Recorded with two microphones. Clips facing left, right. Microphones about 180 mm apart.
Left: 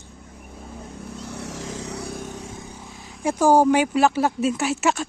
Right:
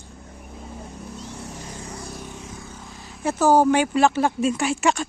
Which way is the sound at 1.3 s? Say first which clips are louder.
Left 4 dB; 75° left (ahead or behind).